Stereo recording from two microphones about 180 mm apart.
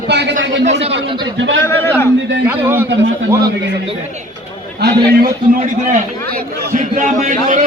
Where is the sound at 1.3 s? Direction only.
90° right.